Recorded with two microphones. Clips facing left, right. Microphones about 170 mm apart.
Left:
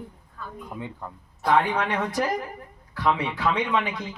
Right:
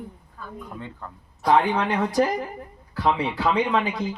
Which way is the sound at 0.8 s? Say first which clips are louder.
Left 2 dB; 15° left (ahead or behind).